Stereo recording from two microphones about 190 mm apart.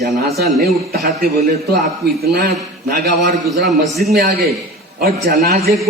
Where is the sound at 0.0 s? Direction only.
55° right (ahead or behind).